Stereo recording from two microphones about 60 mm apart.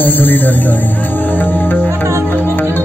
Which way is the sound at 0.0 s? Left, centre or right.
Left.